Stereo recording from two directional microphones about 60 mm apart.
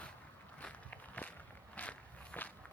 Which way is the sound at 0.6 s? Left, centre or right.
Left.